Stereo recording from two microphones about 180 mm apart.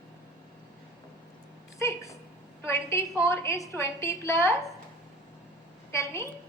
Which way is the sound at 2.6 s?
10° left (ahead or behind).